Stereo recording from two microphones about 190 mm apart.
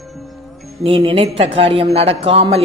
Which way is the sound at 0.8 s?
30° right (ahead or behind).